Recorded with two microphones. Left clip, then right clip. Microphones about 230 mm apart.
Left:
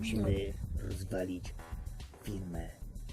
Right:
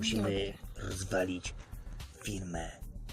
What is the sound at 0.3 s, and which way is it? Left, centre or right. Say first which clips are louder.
Speech: right 2 dB; centre.